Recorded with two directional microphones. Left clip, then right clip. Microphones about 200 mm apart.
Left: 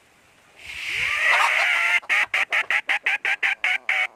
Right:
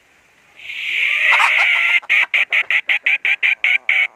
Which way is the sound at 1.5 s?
20° left (ahead or behind).